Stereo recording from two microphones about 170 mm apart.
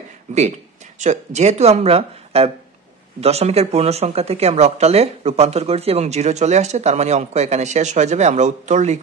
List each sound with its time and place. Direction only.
0.9 s speech: 45° right (ahead or behind)